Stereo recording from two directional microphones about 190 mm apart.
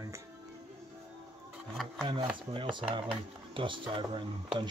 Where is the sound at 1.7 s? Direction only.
Centre (ahead or behind).